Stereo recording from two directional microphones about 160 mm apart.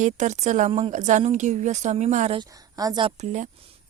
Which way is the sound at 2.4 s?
25° right (ahead or behind).